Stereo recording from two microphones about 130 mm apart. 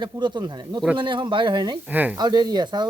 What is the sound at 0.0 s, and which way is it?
Speech, 35° right (ahead or behind).